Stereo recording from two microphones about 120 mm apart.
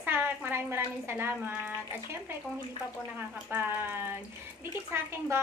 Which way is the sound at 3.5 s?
15° right (ahead or behind).